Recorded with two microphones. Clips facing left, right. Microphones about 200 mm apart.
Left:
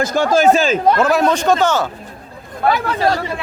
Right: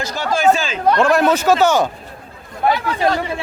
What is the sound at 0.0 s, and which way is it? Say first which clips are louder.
Speech: left 4 dB; 50° left (ahead or behind).